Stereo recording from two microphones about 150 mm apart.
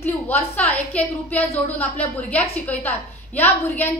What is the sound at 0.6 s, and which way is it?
A woman's voice, 10° left (ahead or behind).